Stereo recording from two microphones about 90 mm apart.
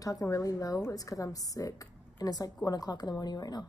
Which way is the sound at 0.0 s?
40° left (ahead or behind).